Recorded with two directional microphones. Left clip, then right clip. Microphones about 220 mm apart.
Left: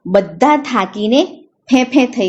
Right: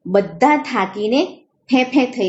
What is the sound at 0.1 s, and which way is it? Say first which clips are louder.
A woman's voice: left 3 dB; 30° left (ahead or behind).